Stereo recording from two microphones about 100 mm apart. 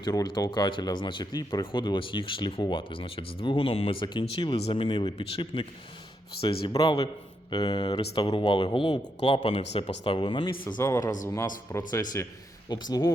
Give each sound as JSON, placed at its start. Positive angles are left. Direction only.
{"t": 0.0, "sound": "speech", "side_deg": 40}
{"t": 4.0, "sound": "speech", "side_deg": 45}
{"t": 4.7, "sound": "speech", "side_deg": 60}
{"t": 7.5, "sound": "speech", "side_deg": 50}
{"t": 9.4, "sound": "speech", "side_deg": 75}
{"t": 9.8, "sound": "speech", "side_deg": 60}
{"t": 10.8, "sound": "speech", "side_deg": 30}